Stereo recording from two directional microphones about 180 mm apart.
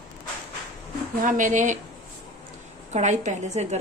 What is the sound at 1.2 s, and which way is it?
Speech, 45° right (ahead or behind).